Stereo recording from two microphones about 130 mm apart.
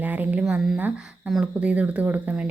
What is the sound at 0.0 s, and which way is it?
Speech, 15° right (ahead or behind).